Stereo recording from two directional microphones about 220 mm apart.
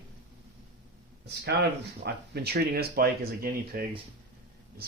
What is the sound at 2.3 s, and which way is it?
Speech, 45° right (ahead or behind).